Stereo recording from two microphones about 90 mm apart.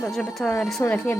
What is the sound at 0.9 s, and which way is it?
Speech, 20° left (ahead or behind).